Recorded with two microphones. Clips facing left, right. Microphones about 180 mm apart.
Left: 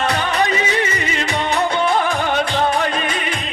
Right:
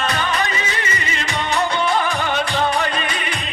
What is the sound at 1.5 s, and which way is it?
Music, 55° left (ahead or behind).